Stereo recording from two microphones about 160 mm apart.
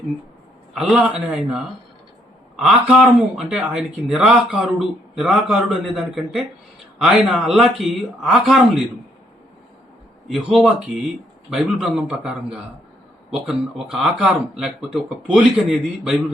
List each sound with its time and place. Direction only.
0.7 s a man's voice: 5° right (ahead or behind)
10.2 s speech: centre (ahead or behind)